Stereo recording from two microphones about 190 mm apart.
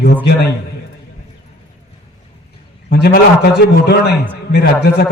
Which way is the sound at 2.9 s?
55° left (ahead or behind).